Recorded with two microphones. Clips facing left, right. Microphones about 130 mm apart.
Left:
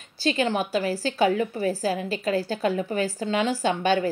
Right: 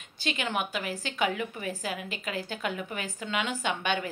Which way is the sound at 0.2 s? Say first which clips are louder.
Left 7 dB; 35° left (ahead or behind).